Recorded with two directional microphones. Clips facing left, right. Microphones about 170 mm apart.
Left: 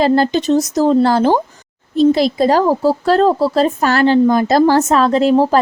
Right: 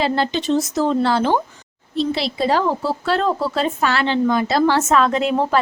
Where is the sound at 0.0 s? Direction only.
45° left (ahead or behind).